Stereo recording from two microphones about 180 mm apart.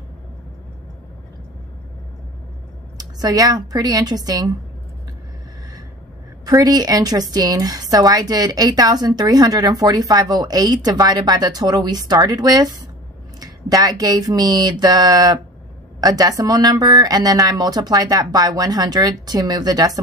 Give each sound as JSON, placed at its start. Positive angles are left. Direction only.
{"t": 3.0, "sound": "a woman's voice", "side_deg": -20}
{"t": 6.4, "sound": "a woman's voice", "side_deg": -20}